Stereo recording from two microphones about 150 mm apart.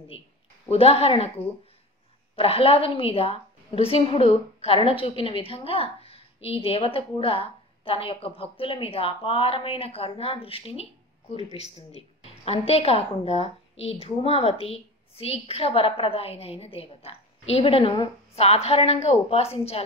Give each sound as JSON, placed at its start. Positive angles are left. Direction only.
{"t": 0.7, "sound": "speech", "side_deg": 40}
{"t": 2.3, "sound": "a woman's voice", "side_deg": 40}